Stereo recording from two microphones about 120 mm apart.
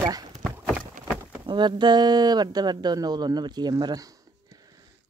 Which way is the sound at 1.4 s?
40° right (ahead or behind).